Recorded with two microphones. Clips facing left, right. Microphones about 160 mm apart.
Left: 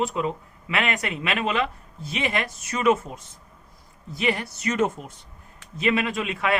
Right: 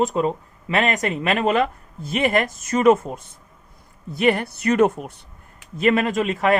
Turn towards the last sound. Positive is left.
turn(degrees=-40)  # may be behind; listen again after turning